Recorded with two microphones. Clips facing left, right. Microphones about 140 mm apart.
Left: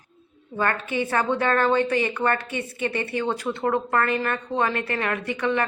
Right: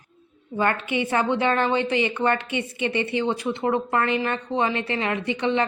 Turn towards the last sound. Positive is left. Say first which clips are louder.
# right 1 dB
turn(degrees=-25)  # may be behind; listen again after turning